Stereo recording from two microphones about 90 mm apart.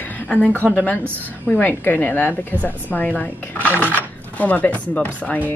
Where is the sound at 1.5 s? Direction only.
20° left (ahead or behind).